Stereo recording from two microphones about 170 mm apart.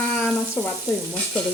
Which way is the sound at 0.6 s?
5° left (ahead or behind).